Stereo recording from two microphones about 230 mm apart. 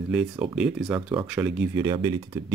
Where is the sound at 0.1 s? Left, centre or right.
Centre.